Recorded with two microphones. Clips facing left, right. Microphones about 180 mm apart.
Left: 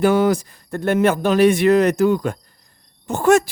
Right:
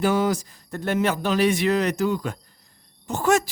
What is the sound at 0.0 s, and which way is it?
Speech, 60° left (ahead or behind).